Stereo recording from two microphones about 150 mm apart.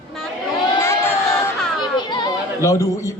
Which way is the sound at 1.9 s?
30° left (ahead or behind).